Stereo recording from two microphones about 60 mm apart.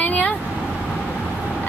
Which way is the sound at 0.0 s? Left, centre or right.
Left.